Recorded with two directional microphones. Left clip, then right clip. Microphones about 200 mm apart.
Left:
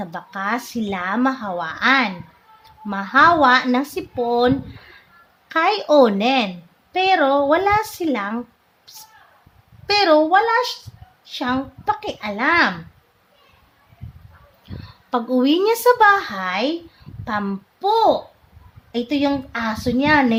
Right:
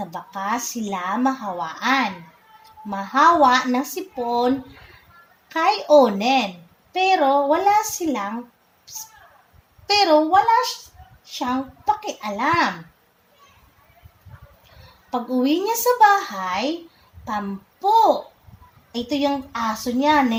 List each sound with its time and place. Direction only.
0.0 s speech: 20° left (ahead or behind)
9.8 s speech: 20° left (ahead or behind)
15.1 s a child's voice: 25° left (ahead or behind)